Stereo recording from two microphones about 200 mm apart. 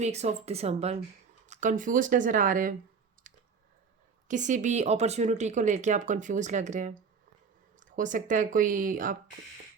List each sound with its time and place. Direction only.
0.0 s speech: 35° right (ahead or behind)
3.3 s a sound: 40° right (ahead or behind)
4.3 s speech: 40° right (ahead or behind)